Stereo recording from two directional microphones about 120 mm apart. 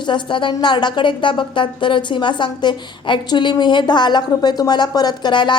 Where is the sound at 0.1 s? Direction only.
45° left (ahead or behind).